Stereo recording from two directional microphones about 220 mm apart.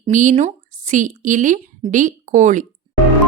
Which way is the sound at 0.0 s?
35° right (ahead or behind).